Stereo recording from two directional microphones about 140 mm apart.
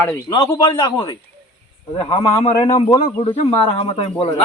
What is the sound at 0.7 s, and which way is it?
A man's voice, 30° left (ahead or behind).